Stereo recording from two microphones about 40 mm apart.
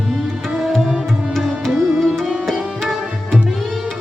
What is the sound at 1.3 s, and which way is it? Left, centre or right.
Music, centre.